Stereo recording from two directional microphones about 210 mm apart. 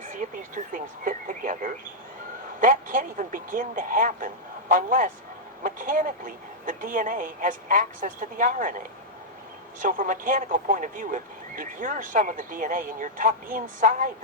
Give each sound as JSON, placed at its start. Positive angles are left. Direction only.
{"t": 0.1, "sound": "speech", "side_deg": -40}
{"t": 9.8, "sound": "speech", "side_deg": -40}